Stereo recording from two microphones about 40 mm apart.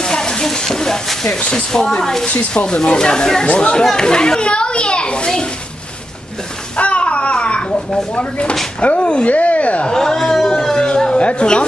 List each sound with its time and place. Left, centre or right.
0.0 s a child's voice: centre
3.8 s a child's voice: centre
6.8 s babbling: left
8.2 s a woman's voice: left
9.8 s a sound: centre
11.1 s a child's voice: left